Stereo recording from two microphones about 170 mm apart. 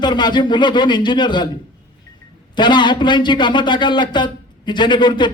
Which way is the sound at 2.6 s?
25° left (ahead or behind).